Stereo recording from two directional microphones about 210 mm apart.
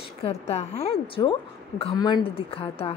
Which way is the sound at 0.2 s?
30° left (ahead or behind).